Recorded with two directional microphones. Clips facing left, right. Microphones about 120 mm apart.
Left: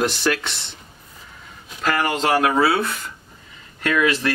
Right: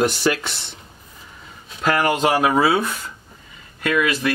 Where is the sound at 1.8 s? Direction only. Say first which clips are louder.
Right 3 dB; 10° right (ahead or behind).